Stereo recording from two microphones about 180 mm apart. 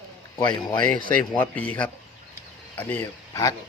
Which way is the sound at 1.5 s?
10° left (ahead or behind).